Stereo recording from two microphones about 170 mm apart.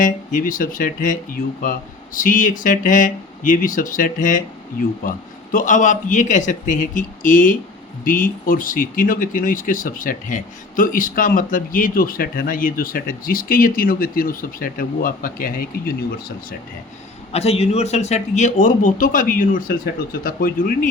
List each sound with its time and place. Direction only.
0.0 s speech: 50° left (ahead or behind)
17.3 s speech: 40° left (ahead or behind)